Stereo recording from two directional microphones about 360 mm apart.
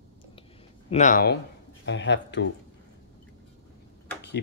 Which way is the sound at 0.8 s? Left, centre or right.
Centre.